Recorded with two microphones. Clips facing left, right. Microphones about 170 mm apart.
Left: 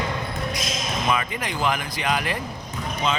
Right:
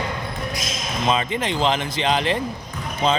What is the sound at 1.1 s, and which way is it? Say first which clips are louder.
Speech: right 5 dB; 25° right (ahead or behind).